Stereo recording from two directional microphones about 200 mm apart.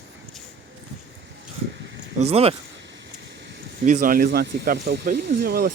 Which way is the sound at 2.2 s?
30° right (ahead or behind).